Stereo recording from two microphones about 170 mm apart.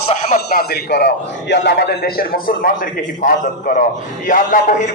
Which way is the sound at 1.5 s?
80° left.